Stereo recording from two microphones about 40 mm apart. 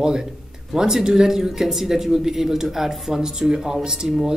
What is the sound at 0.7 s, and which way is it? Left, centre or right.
Speech, centre.